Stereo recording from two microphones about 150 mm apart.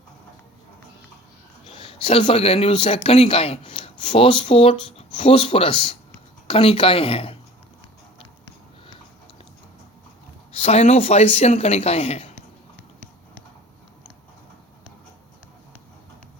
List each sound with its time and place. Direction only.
1.7 s speech: 40° left (ahead or behind)
10.5 s speech: 40° left (ahead or behind)